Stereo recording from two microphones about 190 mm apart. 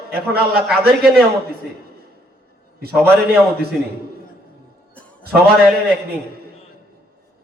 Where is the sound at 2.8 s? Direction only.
55° right (ahead or behind).